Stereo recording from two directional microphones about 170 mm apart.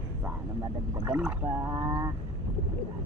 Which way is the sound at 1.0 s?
15° right (ahead or behind).